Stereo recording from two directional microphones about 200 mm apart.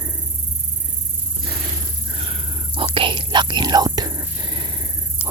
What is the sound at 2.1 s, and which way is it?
Whispering, 30° right (ahead or behind).